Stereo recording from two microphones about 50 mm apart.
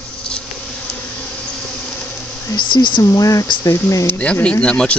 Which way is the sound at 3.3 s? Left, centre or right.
Left.